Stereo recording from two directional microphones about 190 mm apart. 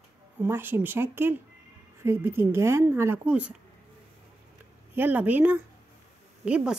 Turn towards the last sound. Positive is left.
turn(degrees=-5)  # may be behind; listen again after turning